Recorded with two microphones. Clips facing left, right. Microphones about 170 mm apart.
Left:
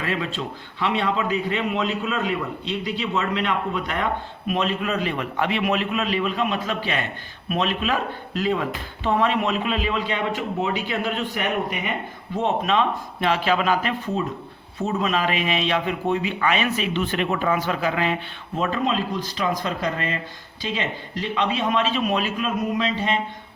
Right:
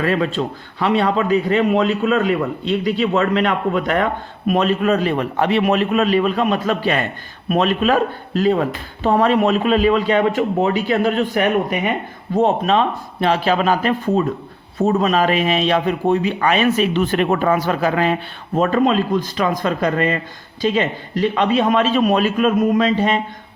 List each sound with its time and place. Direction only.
0.0 s a man's voice: 45° right (ahead or behind)